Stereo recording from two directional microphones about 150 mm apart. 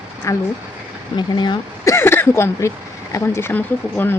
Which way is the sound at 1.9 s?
15° left (ahead or behind).